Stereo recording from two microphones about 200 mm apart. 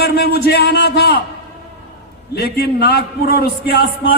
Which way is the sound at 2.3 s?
50° left (ahead or behind).